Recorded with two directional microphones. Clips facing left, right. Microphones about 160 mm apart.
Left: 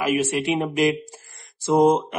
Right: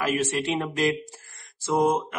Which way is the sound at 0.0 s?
10° left (ahead or behind).